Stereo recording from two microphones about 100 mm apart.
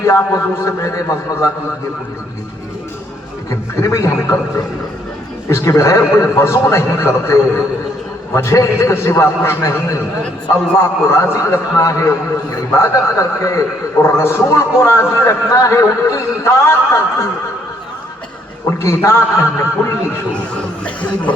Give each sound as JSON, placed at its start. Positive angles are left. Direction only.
{"t": 0.0, "sound": "a man's voice", "side_deg": 30}
{"t": 3.5, "sound": "a man's voice", "side_deg": 30}
{"t": 11.1, "sound": "a man's voice", "side_deg": 30}
{"t": 18.8, "sound": "a man's voice", "side_deg": 30}
{"t": 20.8, "sound": "chuckle", "side_deg": 15}